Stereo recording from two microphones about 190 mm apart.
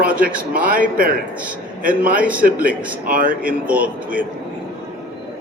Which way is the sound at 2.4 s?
50° right (ahead or behind).